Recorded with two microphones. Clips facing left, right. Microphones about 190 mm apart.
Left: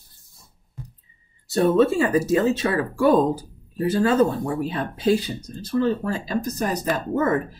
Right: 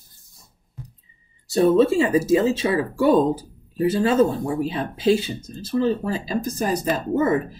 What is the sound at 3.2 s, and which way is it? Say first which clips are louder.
Speech: right 1 dB; 25° right (ahead or behind).